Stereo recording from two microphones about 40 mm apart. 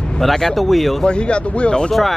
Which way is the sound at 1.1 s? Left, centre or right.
Left.